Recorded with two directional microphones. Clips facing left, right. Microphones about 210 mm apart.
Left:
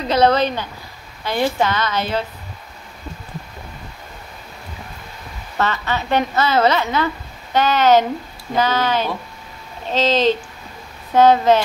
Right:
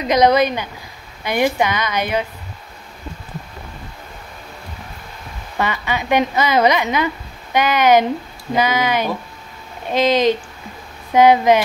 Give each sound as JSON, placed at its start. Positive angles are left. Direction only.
{"t": 0.0, "sound": "a woman's voice", "side_deg": -15}
{"t": 5.6, "sound": "a woman's voice", "side_deg": -10}